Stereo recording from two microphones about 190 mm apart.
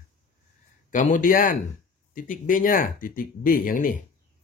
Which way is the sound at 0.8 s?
40° left (ahead or behind).